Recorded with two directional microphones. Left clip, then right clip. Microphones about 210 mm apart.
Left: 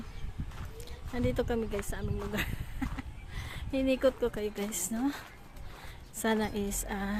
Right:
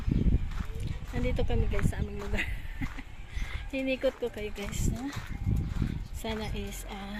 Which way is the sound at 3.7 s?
20° left (ahead or behind).